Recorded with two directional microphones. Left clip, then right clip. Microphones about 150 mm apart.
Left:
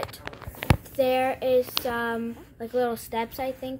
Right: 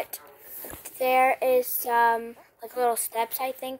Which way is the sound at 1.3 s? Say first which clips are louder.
Right 1 dB; 35° right (ahead or behind).